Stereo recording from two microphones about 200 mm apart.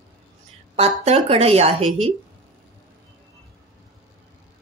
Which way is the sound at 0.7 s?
30° right (ahead or behind).